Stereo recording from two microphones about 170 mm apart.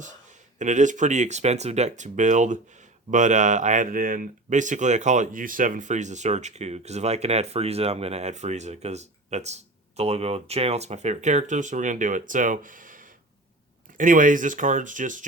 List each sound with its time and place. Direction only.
0.6 s speech: 45° right (ahead or behind)